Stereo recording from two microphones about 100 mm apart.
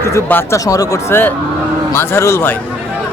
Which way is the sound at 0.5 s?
35° left (ahead or behind).